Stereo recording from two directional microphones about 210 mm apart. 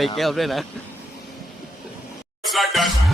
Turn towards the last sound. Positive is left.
turn(degrees=0)  # may be behind; listen again after turning